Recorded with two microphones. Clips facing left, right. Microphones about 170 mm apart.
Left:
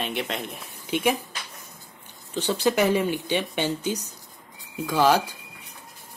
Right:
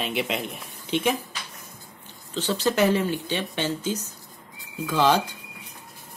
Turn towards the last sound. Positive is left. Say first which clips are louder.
# left 1 dB
turn(degrees=10)  # may be behind; listen again after turning